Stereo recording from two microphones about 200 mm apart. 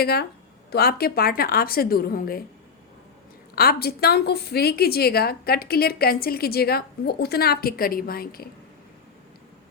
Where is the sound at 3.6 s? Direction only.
50° left (ahead or behind).